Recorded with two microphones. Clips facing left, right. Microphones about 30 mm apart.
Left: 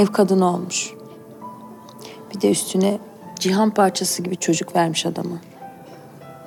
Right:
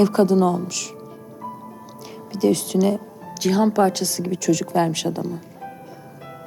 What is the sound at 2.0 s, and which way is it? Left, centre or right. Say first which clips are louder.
A woman's voice: left 1 dB; centre.